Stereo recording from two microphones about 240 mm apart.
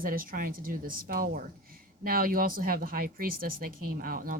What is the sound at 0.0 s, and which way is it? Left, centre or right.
Speech, right.